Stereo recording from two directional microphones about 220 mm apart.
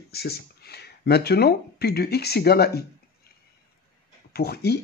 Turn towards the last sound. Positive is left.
turn(degrees=45)  # may be behind; listen again after turning